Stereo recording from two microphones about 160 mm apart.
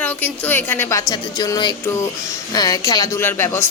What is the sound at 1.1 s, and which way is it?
Speech, 25° left (ahead or behind).